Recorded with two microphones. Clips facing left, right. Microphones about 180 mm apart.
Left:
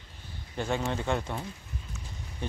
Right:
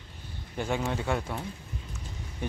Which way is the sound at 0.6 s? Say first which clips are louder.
Even; 10° right (ahead or behind).